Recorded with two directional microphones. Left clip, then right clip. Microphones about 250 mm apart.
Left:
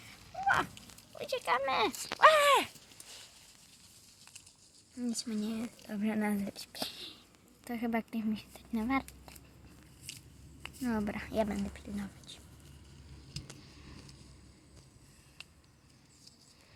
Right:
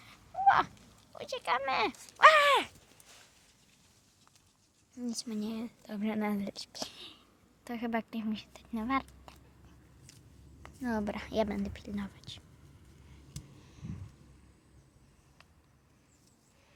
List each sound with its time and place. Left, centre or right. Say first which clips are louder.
0.4 s a sound: right 5 dB; centre
1.2 s speech: left 1 dB; centre
5.2 s speech: left 1 dB; centre
10.6 s speech: right 1 dB; centre